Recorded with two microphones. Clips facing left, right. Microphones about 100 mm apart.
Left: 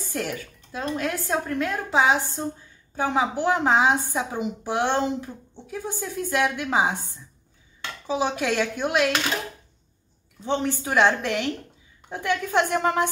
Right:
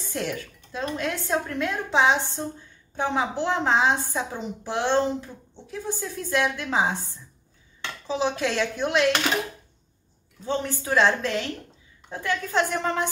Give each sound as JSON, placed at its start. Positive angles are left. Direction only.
{"t": 0.1, "sound": "speech", "side_deg": 5}
{"t": 8.1, "sound": "speech", "side_deg": 10}
{"t": 10.4, "sound": "speech", "side_deg": 20}